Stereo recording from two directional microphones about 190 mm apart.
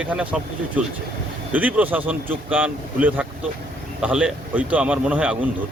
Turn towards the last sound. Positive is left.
turn(degrees=-5)  # may be behind; listen again after turning